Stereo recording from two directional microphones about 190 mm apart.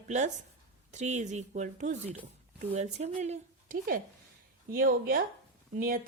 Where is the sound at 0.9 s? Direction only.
40° right (ahead or behind).